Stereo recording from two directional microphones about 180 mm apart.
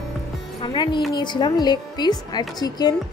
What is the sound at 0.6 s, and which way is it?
Speech, 25° left (ahead or behind).